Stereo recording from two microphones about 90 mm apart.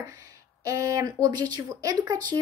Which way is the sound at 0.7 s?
40° right (ahead or behind).